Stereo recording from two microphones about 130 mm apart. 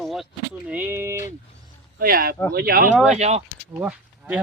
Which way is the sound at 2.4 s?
25° left (ahead or behind).